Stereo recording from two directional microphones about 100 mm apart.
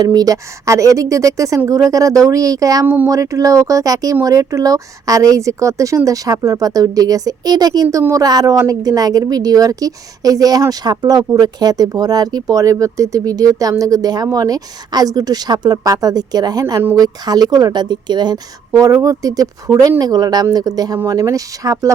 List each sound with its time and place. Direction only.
0.0 s speech: 40° right (ahead or behind)
2.8 s speech: 20° right (ahead or behind)
3.1 s speech: 35° right (ahead or behind)